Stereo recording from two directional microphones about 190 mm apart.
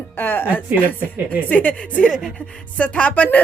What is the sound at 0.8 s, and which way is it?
A woman's voice, 10° left (ahead or behind).